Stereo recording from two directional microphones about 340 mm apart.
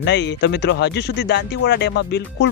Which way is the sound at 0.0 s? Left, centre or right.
Left.